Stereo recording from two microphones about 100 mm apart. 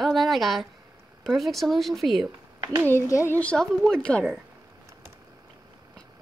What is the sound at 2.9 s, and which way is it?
Speech, 30° left (ahead or behind).